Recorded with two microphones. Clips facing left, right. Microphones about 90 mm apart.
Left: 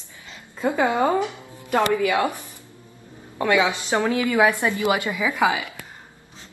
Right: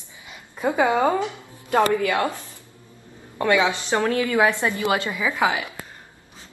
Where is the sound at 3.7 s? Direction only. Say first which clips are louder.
Even; 15° left (ahead or behind).